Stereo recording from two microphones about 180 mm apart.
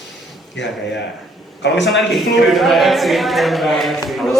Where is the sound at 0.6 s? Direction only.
80° left.